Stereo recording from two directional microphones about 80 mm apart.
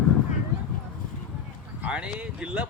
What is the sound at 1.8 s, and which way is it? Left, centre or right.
Speech, centre.